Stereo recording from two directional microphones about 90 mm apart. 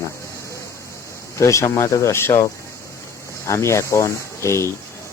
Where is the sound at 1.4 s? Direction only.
35° left (ahead or behind).